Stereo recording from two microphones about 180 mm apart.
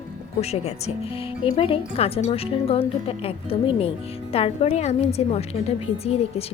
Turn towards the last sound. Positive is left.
turn(degrees=35)  # may be behind; listen again after turning